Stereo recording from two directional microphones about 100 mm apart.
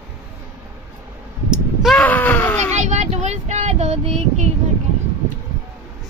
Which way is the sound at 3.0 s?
90° right.